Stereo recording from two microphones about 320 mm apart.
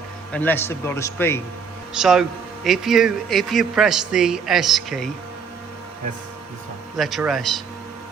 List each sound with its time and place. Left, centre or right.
0.3 s a man's voice: centre
6.9 s a man's voice: centre